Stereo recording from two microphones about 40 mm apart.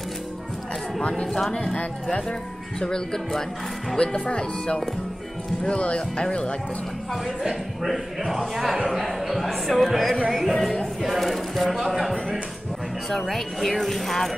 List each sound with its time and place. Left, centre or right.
1.2 s speech: centre
2.8 s speech: centre
4.0 s speech: left
7.4 s speech: centre